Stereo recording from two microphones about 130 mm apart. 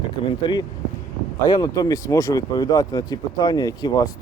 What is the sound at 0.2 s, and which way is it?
Speech, 40° left (ahead or behind).